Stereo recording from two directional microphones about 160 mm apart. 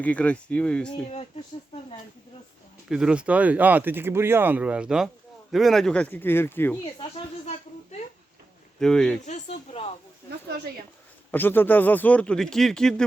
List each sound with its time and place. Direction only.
0.0 s speech: 10° left (ahead or behind)
1.0 s speech: 40° left (ahead or behind)
2.9 s speech: 5° right (ahead or behind); by 6.7 s 15° left (ahead or behind)
8.8 s speech: 5° left (ahead or behind)
9.2 s speech: 45° left (ahead or behind)
11.3 s speech: 10° left (ahead or behind)